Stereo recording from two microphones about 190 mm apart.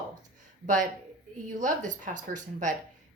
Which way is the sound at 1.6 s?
40° right (ahead or behind).